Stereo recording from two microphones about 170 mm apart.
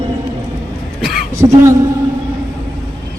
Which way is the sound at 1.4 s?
15° right (ahead or behind).